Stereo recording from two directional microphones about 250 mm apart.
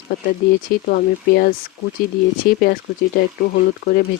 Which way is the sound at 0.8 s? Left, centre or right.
Left.